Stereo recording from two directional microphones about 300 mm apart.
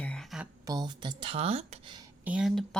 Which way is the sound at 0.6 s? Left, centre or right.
Centre.